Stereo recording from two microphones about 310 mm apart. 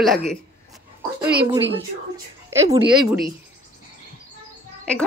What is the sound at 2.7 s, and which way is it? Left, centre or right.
Speech, centre.